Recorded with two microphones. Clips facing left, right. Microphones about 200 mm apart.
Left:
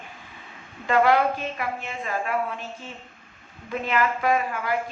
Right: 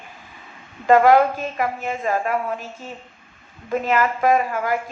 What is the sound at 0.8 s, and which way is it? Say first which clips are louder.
A woman's voice: right 6 dB; 45° right (ahead or behind).